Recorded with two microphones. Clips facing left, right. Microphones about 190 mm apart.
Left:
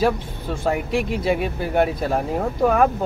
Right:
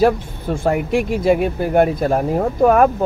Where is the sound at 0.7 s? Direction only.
50° right (ahead or behind).